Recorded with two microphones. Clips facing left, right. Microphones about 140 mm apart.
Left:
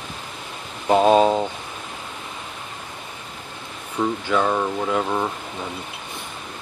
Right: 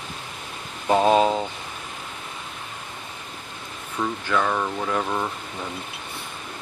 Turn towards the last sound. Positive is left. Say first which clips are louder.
# left 3 dB
turn(degrees=10)  # may be behind; listen again after turning